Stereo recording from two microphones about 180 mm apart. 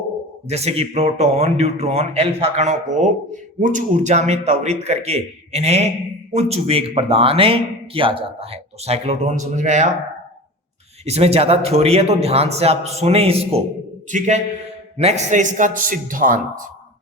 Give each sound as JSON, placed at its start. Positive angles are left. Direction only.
{"t": 0.4, "sound": "speech", "side_deg": -35}
{"t": 11.0, "sound": "a man's voice", "side_deg": -35}